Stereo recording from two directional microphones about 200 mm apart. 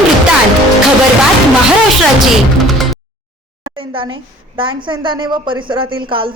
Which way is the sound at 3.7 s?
25° right (ahead or behind).